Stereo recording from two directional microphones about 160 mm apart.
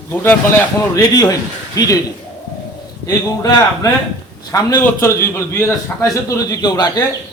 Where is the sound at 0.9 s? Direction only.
25° left (ahead or behind).